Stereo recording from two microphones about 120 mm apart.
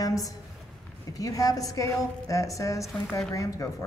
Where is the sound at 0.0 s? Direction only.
30° left (ahead or behind).